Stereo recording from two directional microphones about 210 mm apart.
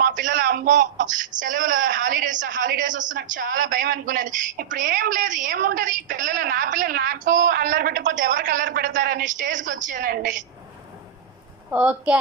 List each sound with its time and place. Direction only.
0.0 s speech: 40° right (ahead or behind)
11.7 s a woman's voice: 5° right (ahead or behind)